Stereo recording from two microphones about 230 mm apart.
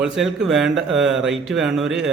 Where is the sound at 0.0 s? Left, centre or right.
Centre.